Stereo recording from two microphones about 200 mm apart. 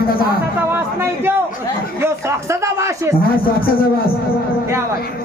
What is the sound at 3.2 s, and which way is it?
Speech, 50° left (ahead or behind).